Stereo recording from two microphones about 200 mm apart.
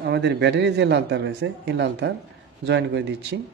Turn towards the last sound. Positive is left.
turn(degrees=-60)  # may be behind; listen again after turning